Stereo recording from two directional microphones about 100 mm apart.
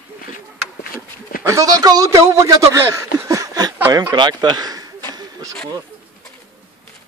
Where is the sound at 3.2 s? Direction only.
35° right (ahead or behind).